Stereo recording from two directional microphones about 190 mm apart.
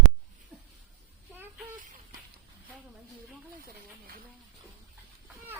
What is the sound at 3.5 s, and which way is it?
Snake, 50° right (ahead or behind).